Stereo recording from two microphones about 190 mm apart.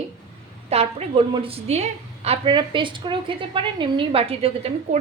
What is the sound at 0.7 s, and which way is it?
A woman's voice, 35° right (ahead or behind).